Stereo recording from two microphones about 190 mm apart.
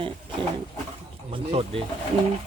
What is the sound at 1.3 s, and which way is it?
Speech, 30° right (ahead or behind).